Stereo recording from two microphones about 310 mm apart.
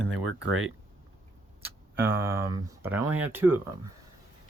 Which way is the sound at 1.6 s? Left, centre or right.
Centre.